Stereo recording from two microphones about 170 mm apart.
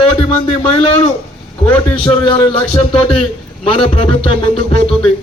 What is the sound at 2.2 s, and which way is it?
A man's voice, 30° left (ahead or behind).